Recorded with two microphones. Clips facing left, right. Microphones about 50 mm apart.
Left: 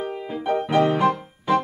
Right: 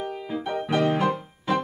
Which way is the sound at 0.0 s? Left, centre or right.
Centre.